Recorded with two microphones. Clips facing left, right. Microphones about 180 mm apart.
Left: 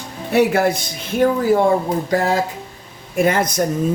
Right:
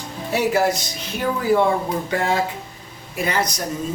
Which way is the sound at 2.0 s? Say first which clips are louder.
Left 4 dB; 40° left (ahead or behind).